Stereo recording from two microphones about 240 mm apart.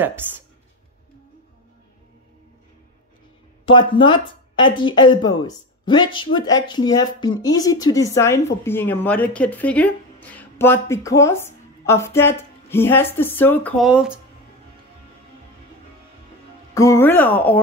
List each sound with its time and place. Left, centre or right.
3.7 s speech: left; by 14.2 s centre
16.7 s speech: centre